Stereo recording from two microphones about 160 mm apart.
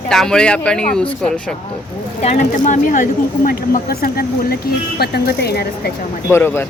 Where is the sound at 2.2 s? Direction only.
50° left (ahead or behind); by 5.9 s 80° left.